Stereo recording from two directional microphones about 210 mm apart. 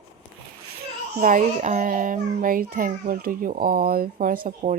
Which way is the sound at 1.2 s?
35° right (ahead or behind).